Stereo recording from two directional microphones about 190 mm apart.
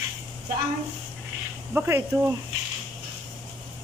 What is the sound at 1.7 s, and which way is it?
Speech, 10° right (ahead or behind).